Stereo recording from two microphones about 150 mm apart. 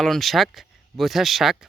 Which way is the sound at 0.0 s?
Centre (ahead or behind).